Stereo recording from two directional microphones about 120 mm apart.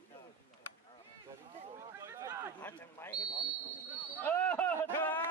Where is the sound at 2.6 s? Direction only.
20° left (ahead or behind).